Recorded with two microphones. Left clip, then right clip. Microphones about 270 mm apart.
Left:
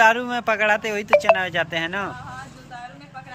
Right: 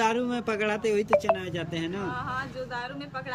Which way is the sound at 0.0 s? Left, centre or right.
Centre.